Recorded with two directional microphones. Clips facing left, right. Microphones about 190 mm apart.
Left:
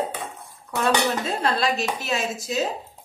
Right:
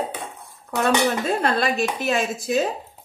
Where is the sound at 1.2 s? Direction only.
55° right (ahead or behind).